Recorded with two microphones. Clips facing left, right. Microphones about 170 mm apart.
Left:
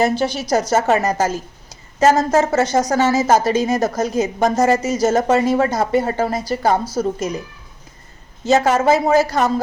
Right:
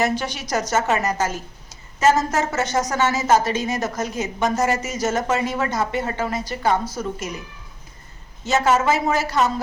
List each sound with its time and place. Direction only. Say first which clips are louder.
0.0 s a woman's voice: left 5 dB; 30° left (ahead or behind)
8.4 s a woman's voice: left 4 dB; 35° left (ahead or behind)